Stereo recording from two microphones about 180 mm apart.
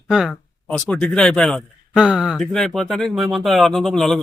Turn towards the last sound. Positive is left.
turn(degrees=0)  # may be behind; listen again after turning